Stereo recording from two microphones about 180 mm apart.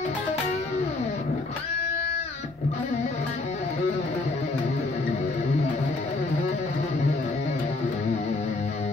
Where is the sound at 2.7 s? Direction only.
35° left (ahead or behind).